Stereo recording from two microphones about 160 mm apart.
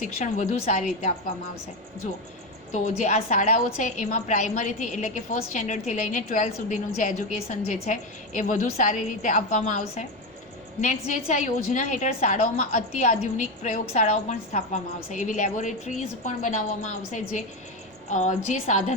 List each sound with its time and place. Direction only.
0.3 s a woman's voice: 50° left (ahead or behind)
2.7 s a woman's voice: 50° left (ahead or behind)